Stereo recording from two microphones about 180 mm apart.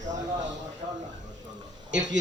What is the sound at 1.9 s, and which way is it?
Speech, 85° right.